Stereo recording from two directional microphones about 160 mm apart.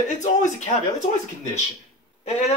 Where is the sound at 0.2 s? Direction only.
50° left (ahead or behind).